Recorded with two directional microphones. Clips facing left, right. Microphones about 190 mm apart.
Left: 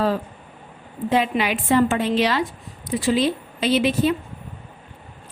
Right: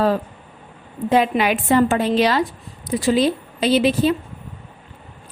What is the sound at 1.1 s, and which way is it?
A woman's voice, 45° right (ahead or behind).